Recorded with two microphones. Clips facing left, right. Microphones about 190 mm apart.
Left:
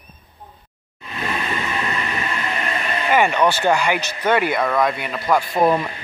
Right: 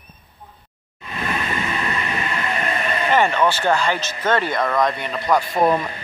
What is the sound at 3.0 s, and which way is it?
Speech, 10° left (ahead or behind).